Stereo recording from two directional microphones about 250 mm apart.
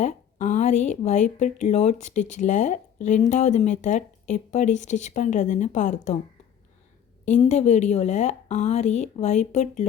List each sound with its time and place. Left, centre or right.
0.0 s speech: left
7.3 s speech: left